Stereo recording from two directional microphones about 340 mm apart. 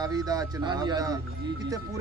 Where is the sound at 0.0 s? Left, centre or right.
Centre.